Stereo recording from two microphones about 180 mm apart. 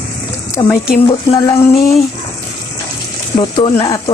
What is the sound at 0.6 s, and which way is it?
Speech, 20° left (ahead or behind).